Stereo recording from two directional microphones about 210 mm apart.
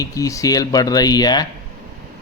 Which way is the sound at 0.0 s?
15° left (ahead or behind).